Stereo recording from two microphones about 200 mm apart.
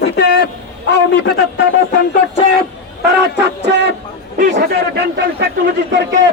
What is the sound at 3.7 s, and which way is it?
A man's voice, 60° right (ahead or behind).